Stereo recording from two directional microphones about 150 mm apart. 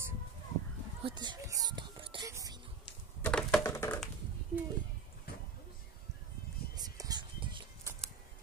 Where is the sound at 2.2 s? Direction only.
25° right (ahead or behind).